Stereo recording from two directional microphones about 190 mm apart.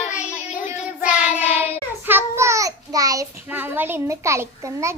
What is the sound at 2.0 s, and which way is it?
A child's voice, 10° right (ahead or behind).